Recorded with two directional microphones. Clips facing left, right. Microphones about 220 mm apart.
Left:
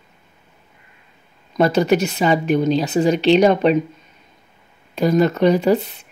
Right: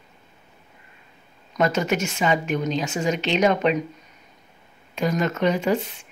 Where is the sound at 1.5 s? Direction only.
35° left (ahead or behind).